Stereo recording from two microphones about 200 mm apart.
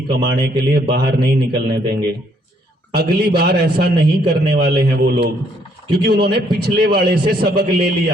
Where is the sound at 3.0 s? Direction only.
50° right (ahead or behind).